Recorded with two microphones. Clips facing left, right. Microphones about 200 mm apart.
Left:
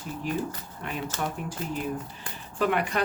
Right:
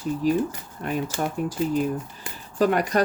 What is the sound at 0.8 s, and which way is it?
Speech, 40° right (ahead or behind).